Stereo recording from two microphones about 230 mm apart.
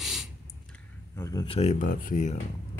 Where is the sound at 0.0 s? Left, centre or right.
Centre.